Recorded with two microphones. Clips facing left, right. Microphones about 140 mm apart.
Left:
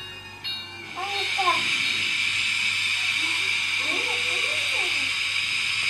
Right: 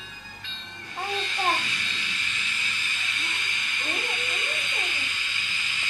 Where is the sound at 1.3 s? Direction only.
40° left (ahead or behind).